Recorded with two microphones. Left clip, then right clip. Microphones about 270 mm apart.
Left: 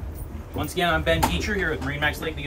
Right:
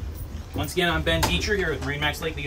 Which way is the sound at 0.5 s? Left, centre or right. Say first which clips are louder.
Left 1 dB; centre.